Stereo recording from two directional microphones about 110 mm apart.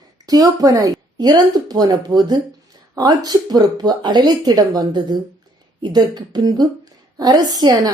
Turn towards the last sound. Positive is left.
turn(degrees=-35)  # may be behind; listen again after turning